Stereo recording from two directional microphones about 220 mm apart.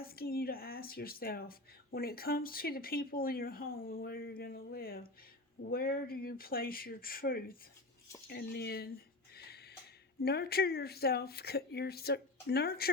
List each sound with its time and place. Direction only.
0.0 s speech: 45° left (ahead or behind)
9.3 s music: 45° left (ahead or behind)
10.2 s speech: 45° left (ahead or behind)